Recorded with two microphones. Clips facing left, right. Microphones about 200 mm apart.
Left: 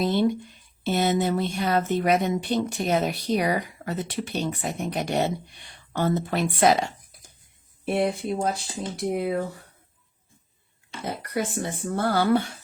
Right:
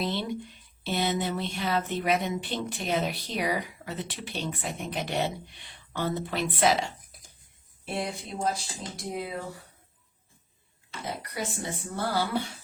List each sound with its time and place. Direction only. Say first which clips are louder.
0.0 s speech: left 8 dB; 45° left (ahead or behind)
7.9 s speech: left 9 dB; 55° left (ahead or behind)
11.0 s speech: left 6 dB; 55° left (ahead or behind)